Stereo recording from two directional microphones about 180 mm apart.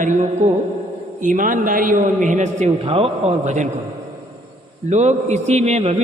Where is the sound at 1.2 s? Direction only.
45° right (ahead or behind).